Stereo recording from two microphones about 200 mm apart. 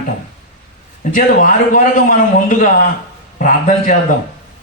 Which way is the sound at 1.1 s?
40° left (ahead or behind).